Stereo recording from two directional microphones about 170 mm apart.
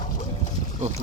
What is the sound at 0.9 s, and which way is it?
Speech, 40° right (ahead or behind).